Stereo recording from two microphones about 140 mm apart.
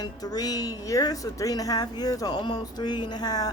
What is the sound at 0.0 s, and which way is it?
Speech, 25° left (ahead or behind).